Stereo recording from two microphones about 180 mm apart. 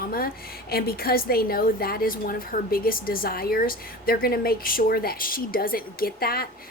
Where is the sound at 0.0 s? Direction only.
55° left (ahead or behind).